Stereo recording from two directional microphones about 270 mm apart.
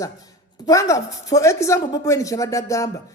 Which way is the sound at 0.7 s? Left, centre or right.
Centre.